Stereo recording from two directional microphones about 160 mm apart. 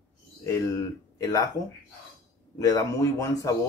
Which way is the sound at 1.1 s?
20° left (ahead or behind).